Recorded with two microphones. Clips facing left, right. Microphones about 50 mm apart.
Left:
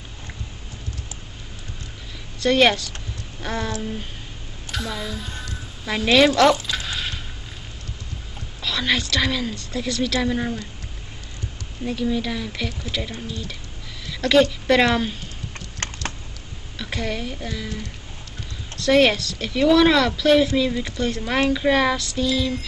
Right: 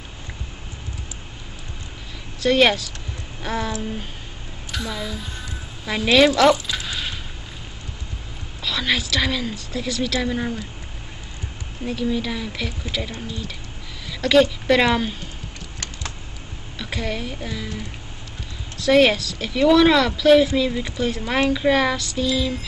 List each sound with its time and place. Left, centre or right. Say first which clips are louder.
2.4 s a woman's voice: even; centre
8.6 s a woman's voice: even; centre
11.8 s a woman's voice: even; centre
15.8 s a sound: left 5 dB; left
16.7 s a woman's voice: even; centre